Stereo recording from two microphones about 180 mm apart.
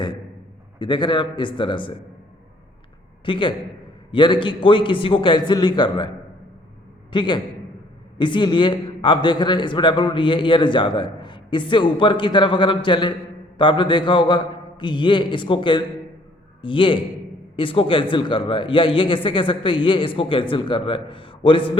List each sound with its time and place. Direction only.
0.8 s a man's voice: 25° left (ahead or behind)
3.2 s a man's voice: 30° left (ahead or behind)